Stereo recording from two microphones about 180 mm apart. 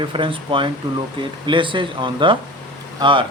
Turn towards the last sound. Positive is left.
turn(degrees=-25)  # may be behind; listen again after turning